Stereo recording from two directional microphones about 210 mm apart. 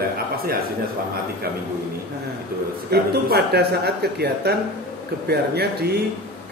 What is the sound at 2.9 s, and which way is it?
Speech, 50° right (ahead or behind).